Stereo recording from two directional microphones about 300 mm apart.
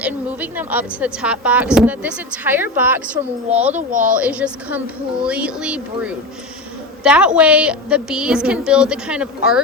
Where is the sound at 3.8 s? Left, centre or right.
Right.